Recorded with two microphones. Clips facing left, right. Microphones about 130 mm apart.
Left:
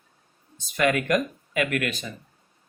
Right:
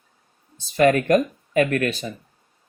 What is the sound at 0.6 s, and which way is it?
Speech, 40° right (ahead or behind).